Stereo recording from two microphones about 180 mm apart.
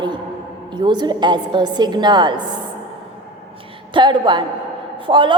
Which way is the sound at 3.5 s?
30° right (ahead or behind).